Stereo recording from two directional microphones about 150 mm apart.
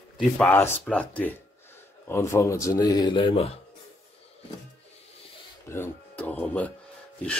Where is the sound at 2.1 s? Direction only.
20° left (ahead or behind); by 3.5 s 35° left (ahead or behind).